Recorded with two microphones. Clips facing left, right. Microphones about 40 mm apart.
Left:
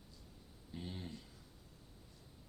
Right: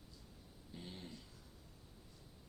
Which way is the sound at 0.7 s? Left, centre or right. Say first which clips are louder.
Left 4 dB; centre.